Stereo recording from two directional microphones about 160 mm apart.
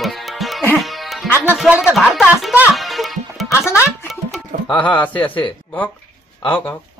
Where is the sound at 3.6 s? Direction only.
15° left (ahead or behind).